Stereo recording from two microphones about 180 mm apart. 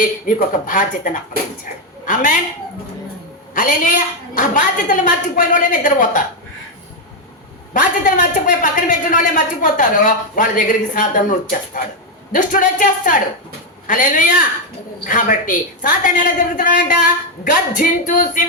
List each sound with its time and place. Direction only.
0.0 s a man's voice: 45° left (ahead or behind)
3.5 s a man's voice: 50° left (ahead or behind)
7.7 s a man's voice: 45° left (ahead or behind)